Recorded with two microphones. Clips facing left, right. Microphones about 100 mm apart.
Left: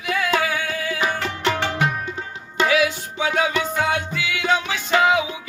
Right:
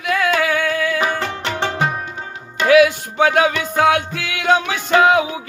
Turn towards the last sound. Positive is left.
turn(degrees=-50)  # may be behind; listen again after turning